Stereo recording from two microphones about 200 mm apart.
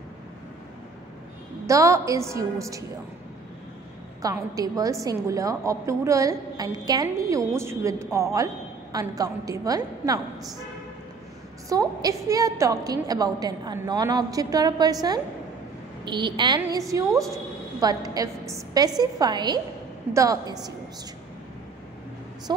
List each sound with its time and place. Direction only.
1.7 s a woman's voice: 15° right (ahead or behind)
4.2 s a woman's voice: 15° right (ahead or behind)
11.7 s a woman's voice: 20° right (ahead or behind)